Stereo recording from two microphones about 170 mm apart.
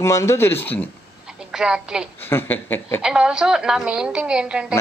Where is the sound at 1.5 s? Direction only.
5° right (ahead or behind).